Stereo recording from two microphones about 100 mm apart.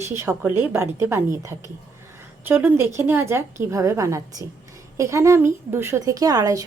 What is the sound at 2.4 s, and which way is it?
A woman's voice, 20° right (ahead or behind).